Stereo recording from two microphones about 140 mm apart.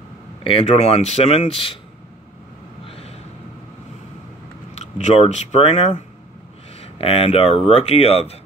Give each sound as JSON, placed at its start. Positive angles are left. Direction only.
{"t": 0.4, "sound": "speech", "side_deg": 40}
{"t": 2.9, "sound": "a sound", "side_deg": 45}
{"t": 4.7, "sound": "speech", "side_deg": 50}